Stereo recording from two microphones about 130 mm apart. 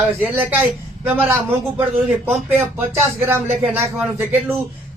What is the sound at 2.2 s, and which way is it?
Speech, 15° right (ahead or behind).